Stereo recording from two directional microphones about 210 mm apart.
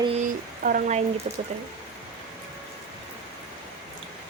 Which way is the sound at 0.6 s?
40° right (ahead or behind).